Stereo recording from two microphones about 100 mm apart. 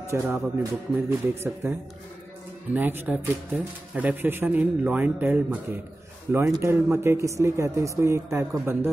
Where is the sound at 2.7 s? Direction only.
20° right (ahead or behind).